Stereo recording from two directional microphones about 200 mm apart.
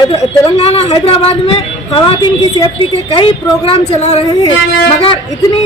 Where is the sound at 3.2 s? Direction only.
30° left (ahead or behind).